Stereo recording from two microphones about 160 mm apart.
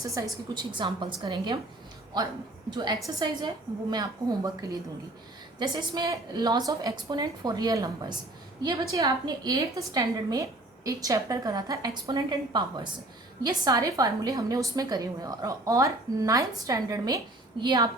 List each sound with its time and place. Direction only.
0.1 s a woman's voice: 25° right (ahead or behind)
8.9 s a woman's voice: 20° right (ahead or behind)